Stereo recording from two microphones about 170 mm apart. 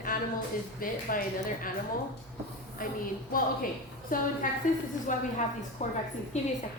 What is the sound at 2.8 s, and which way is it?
Speech, 55° left (ahead or behind).